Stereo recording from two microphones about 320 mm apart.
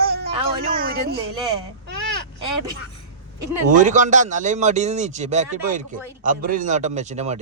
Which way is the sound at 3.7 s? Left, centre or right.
Right.